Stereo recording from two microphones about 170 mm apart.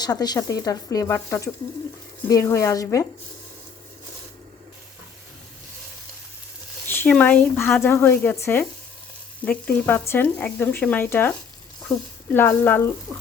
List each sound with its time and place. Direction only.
0.0 s speech: 25° left (ahead or behind)
6.8 s speech: 10° left (ahead or behind)